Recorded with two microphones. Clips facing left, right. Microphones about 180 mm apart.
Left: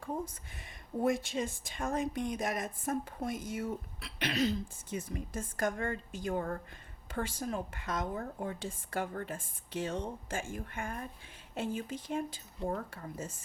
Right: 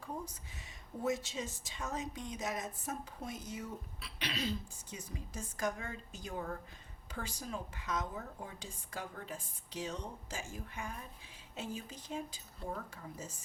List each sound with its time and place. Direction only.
1.0 s speech: 55° left (ahead or behind)